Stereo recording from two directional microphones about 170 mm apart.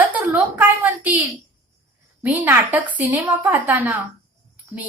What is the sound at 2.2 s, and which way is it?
A woman's voice, 10° right (ahead or behind).